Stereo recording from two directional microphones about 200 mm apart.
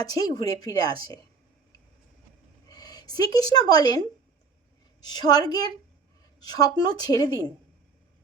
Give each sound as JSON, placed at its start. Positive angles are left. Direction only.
{"t": 0.0, "sound": "a woman's voice", "side_deg": 20}
{"t": 2.6, "sound": "a woman's voice", "side_deg": 20}